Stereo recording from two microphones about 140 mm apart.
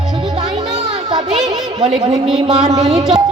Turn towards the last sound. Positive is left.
turn(degrees=-5)  # may be behind; listen again after turning